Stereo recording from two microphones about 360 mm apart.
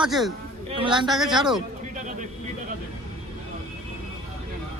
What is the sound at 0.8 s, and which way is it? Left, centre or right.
Speech, centre.